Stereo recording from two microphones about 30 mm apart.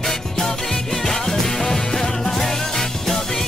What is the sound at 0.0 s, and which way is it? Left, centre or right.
Music, centre.